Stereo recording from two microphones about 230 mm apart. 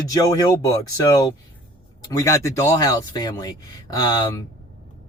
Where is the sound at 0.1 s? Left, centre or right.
Centre.